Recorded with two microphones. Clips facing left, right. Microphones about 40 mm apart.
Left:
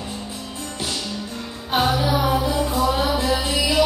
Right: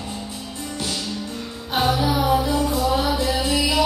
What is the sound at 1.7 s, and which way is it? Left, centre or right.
Music, centre.